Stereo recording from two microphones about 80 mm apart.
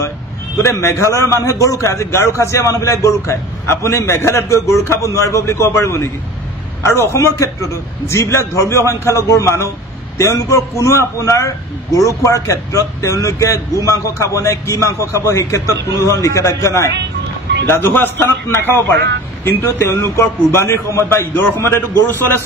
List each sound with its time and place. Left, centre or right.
0.6 s a man's voice: left
17.6 s a man's voice: left